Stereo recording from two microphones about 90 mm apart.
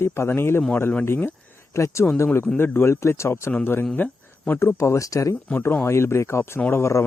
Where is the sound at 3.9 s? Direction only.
20° left (ahead or behind).